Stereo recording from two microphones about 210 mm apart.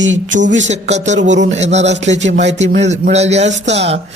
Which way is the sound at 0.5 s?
30° right (ahead or behind).